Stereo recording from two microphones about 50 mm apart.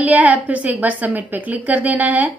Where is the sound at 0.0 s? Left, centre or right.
Right.